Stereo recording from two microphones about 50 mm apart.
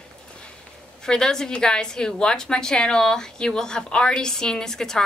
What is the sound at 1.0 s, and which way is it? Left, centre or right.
A woman's voice, centre.